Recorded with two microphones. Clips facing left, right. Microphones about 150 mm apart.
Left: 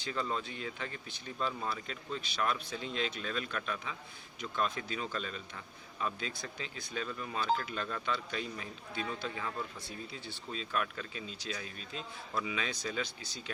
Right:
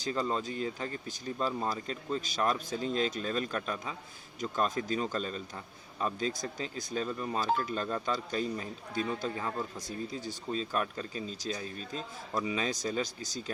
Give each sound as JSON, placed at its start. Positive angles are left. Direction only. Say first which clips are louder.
{"t": 0.0, "sound": "a man's voice", "louder": "right 4 dB", "side_deg": -40}